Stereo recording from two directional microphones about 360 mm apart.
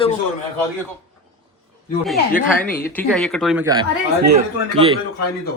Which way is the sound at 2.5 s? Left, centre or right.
Centre.